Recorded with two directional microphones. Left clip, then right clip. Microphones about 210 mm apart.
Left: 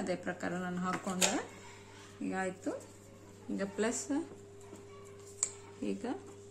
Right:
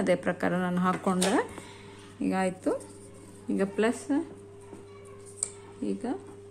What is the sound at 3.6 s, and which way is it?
Speech, 30° right (ahead or behind).